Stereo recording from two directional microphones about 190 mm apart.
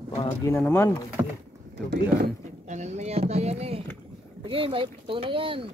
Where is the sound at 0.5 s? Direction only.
10° left (ahead or behind).